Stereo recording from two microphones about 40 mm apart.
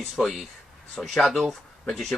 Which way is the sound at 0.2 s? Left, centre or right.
Centre.